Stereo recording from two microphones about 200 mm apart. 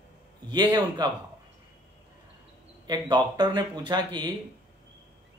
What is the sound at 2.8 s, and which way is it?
Speech, 20° right (ahead or behind).